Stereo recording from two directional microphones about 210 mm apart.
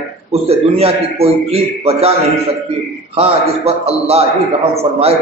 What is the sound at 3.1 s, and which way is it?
A man's voice, 30° right (ahead or behind).